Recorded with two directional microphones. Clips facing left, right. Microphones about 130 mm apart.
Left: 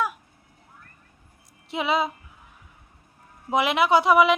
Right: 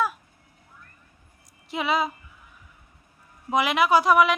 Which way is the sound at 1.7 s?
25° left (ahead or behind).